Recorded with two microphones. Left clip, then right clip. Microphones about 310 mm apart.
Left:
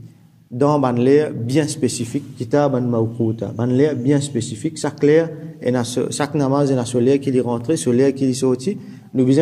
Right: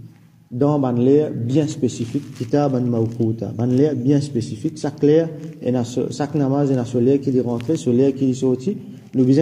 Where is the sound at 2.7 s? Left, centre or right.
Left.